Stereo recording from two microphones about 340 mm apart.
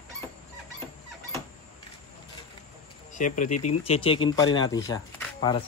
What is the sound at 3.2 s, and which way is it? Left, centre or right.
Speech, left.